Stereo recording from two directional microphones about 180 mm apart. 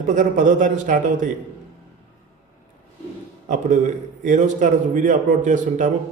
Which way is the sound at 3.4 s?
45° right (ahead or behind).